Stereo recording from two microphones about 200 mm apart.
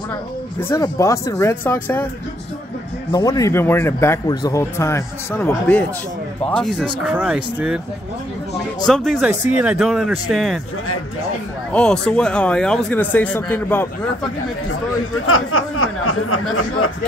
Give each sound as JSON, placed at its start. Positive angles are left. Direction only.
{"t": 0.6, "sound": "speech", "side_deg": 15}
{"t": 3.1, "sound": "speech", "side_deg": 20}
{"t": 8.8, "sound": "speech", "side_deg": 0}
{"t": 11.7, "sound": "speech", "side_deg": 5}
{"t": 15.2, "sound": "speech", "side_deg": 90}